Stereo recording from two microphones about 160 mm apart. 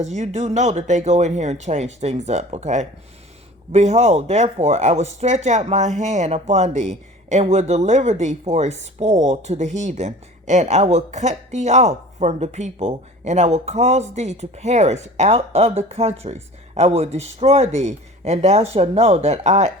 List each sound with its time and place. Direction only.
0.0 s speech: 45° right (ahead or behind)